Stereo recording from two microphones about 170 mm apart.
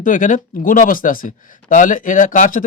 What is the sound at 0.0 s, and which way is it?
Speech, 50° left (ahead or behind).